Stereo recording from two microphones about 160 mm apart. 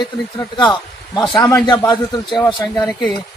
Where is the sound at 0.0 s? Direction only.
30° left (ahead or behind).